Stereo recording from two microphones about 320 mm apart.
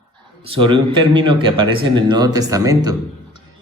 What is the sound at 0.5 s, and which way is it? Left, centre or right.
Speech, centre.